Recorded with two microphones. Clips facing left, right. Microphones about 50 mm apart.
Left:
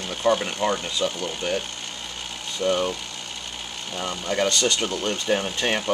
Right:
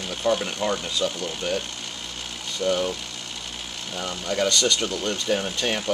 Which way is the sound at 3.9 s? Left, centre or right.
Centre.